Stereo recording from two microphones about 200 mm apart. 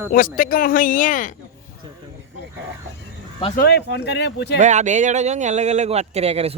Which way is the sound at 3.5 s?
50° left (ahead or behind).